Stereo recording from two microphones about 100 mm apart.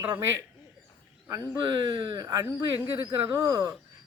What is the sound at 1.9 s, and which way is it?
Speech, 45° right (ahead or behind).